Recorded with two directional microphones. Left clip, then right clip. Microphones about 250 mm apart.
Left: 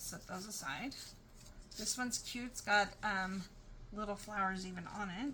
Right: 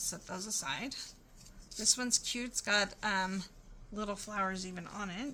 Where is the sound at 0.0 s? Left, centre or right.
Right.